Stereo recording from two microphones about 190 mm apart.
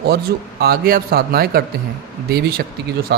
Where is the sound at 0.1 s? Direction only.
55° right (ahead or behind).